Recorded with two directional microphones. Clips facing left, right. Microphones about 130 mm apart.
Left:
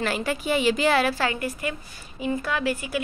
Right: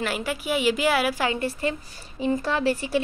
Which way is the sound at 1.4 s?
30° right (ahead or behind).